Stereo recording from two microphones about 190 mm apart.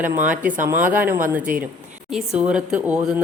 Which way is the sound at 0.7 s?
10° right (ahead or behind).